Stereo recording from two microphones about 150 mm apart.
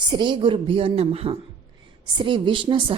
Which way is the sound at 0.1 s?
30° right (ahead or behind).